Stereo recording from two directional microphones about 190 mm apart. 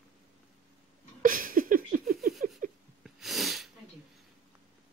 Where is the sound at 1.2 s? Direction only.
45° right (ahead or behind).